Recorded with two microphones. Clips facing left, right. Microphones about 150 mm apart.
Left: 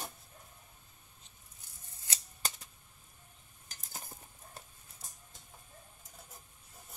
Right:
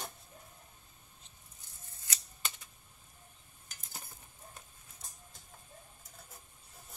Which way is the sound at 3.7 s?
40° left (ahead or behind).